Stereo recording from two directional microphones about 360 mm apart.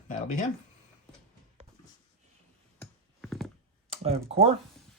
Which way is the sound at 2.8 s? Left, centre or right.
Centre.